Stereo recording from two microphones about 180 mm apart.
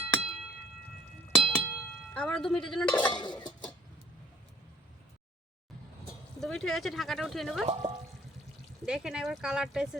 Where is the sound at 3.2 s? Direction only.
25° left (ahead or behind).